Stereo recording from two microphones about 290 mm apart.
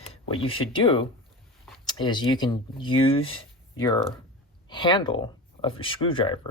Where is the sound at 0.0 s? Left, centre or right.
Centre.